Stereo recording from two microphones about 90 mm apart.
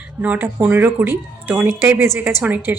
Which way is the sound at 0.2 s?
20° right (ahead or behind).